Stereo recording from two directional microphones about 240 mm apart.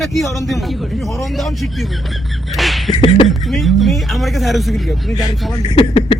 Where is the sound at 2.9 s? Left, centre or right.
Left.